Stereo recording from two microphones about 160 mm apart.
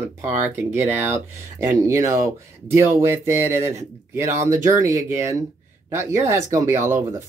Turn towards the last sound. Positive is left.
turn(degrees=-15)  # may be behind; listen again after turning